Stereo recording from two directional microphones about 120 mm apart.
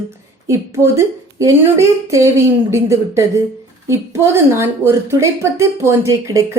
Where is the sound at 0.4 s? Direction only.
25° right (ahead or behind).